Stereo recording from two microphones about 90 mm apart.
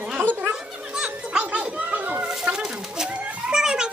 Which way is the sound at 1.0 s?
15° right (ahead or behind).